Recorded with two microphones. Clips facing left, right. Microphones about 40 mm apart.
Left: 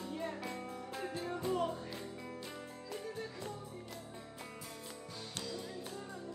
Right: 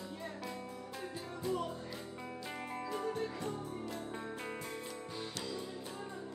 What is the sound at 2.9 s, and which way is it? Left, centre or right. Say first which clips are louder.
Music: right 5 dB; right.